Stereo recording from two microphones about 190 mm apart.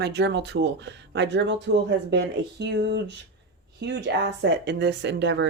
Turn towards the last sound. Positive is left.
turn(degrees=-65)  # may be behind; listen again after turning